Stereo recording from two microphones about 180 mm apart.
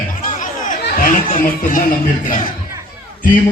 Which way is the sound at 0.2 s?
45° left (ahead or behind).